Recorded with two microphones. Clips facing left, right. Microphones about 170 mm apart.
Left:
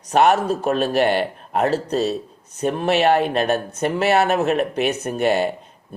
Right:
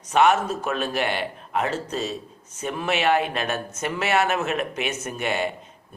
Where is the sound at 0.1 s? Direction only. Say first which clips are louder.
Left 3 dB; 35° left (ahead or behind).